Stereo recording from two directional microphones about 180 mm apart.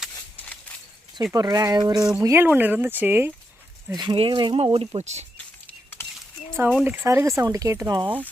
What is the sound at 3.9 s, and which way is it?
Speech, 25° right (ahead or behind).